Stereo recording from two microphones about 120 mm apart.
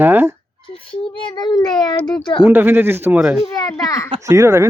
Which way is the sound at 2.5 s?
15° right (ahead or behind).